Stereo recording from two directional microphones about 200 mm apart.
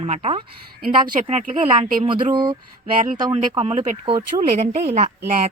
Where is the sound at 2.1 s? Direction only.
25° right (ahead or behind).